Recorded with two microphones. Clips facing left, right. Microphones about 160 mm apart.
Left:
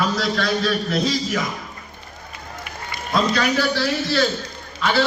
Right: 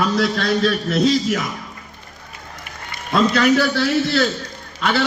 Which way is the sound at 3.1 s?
60° right (ahead or behind).